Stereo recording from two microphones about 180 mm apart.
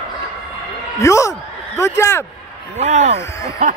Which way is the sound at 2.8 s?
35° right (ahead or behind).